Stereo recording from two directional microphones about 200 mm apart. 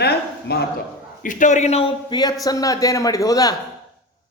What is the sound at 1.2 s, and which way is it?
Speech, 40° left (ahead or behind).